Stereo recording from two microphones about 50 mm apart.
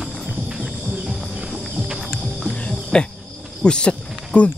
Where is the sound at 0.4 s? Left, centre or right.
Centre.